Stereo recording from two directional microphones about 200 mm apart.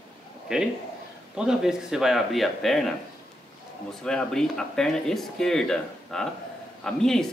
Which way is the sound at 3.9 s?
5° left (ahead or behind).